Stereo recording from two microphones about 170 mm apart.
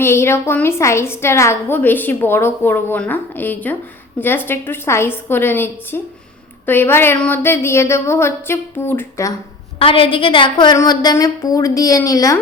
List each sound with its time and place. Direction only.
0.0 s a woman's voice: 15° left (ahead or behind)
9.7 s a woman's voice: 30° left (ahead or behind)